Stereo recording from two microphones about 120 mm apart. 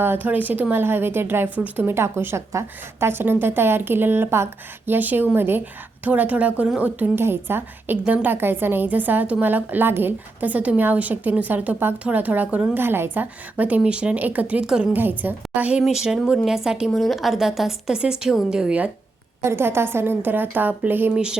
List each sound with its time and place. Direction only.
0.0 s a woman's voice: 15° right (ahead or behind)
19.4 s a woman's voice: 20° right (ahead or behind)